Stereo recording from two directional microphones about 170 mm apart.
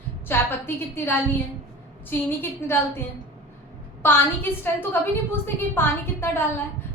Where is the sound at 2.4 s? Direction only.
15° left (ahead or behind).